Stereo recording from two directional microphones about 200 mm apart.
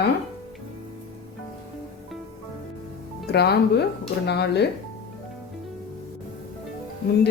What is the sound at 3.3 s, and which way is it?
A woman's voice, 55° left (ahead or behind).